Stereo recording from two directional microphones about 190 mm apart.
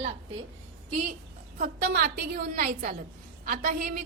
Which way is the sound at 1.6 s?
55° right (ahead or behind).